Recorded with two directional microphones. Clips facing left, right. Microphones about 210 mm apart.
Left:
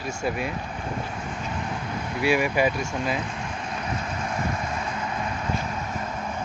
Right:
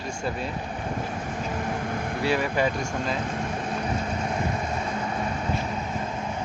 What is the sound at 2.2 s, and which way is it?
Speech, 10° left (ahead or behind).